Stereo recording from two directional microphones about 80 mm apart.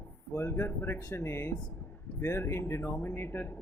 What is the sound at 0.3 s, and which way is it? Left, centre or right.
A man's voice, left.